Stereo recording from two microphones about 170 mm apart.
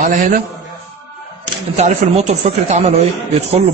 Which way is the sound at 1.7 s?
40° right (ahead or behind).